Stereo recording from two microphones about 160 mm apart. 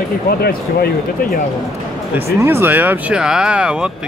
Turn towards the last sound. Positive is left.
turn(degrees=-5)  # may be behind; listen again after turning